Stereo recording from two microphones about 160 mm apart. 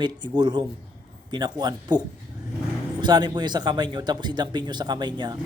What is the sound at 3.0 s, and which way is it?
Speech, 25° right (ahead or behind).